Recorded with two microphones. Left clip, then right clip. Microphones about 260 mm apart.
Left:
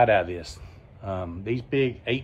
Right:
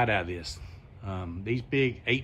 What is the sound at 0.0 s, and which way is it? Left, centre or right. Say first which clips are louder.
A man's voice: left 7 dB; centre.